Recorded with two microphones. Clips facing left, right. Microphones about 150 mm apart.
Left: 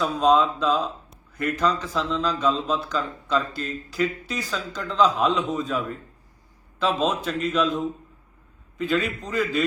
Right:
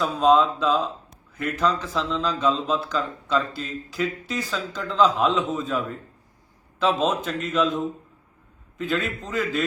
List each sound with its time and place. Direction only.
0.0 s a man's voice: centre (ahead or behind)
1.8 s a man's voice: 10° left (ahead or behind)
8.8 s a man's voice: centre (ahead or behind)